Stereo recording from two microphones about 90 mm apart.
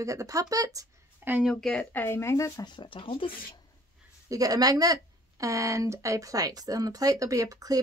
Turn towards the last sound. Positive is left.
turn(degrees=-40)  # may be behind; listen again after turning